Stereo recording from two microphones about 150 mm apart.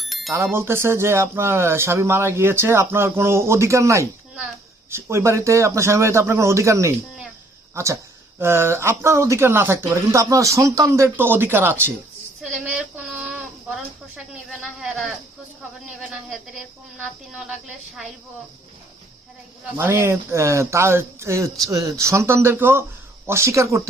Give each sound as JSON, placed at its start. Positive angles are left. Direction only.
{"t": 0.0, "sound": "bicycle bell", "side_deg": 0}
{"t": 0.5, "sound": "a man's voice", "side_deg": -15}
{"t": 12.4, "sound": "a sound", "side_deg": -5}
{"t": 14.5, "sound": "a woman's voice", "side_deg": 0}
{"t": 19.7, "sound": "a man's voice", "side_deg": -15}